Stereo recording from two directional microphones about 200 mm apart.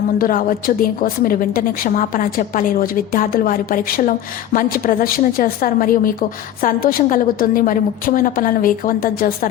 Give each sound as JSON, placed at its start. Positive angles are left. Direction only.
{"t": 0.2, "sound": "a woman's voice", "side_deg": 45}